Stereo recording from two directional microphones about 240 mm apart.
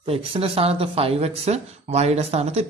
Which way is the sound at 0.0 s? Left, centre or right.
Right.